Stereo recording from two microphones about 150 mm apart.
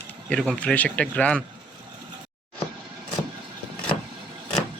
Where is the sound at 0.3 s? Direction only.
5° left (ahead or behind).